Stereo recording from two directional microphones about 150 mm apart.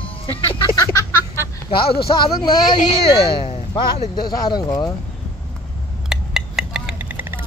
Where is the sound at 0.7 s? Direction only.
20° left (ahead or behind).